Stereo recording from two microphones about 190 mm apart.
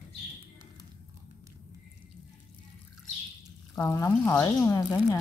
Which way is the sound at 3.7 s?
15° left (ahead or behind).